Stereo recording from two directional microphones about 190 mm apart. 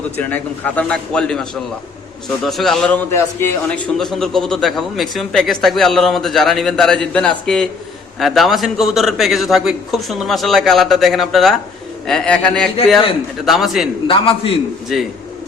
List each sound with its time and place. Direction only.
0.2 s a man's voice: 10° left (ahead or behind)
3.1 s a man's voice: 15° left (ahead or behind)
3.8 s a man's voice: centre (ahead or behind)
14.1 s a man's voice: 30° left (ahead or behind)
14.9 s a man's voice: centre (ahead or behind)